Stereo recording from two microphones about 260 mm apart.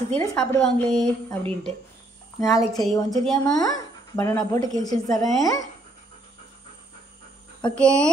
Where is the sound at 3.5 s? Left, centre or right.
Centre.